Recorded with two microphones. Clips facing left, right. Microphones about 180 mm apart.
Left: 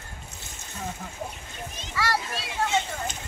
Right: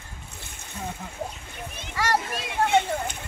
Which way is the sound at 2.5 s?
55° right (ahead or behind).